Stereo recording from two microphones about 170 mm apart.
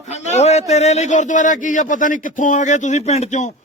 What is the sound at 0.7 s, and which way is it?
A man's voice, 40° left (ahead or behind).